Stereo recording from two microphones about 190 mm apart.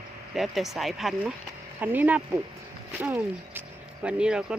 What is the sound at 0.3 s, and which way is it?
Speech, centre (ahead or behind).